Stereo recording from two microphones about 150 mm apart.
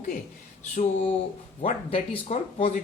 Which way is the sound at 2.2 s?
45° left (ahead or behind).